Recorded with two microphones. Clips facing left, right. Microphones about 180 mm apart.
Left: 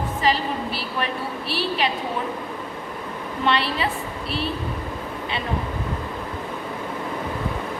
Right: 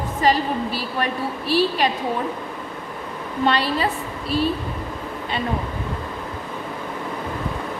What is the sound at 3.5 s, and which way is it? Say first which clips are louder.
Speech: right 2 dB; 40° right (ahead or behind).